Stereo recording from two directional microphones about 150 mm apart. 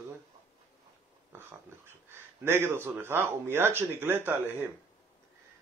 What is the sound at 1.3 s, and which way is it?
Speech, 15° right (ahead or behind).